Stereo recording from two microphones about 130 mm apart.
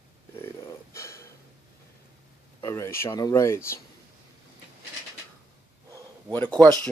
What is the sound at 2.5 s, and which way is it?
Speech, 20° left (ahead or behind).